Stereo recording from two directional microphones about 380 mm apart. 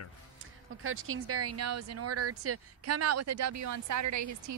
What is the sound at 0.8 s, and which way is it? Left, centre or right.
Speech, right.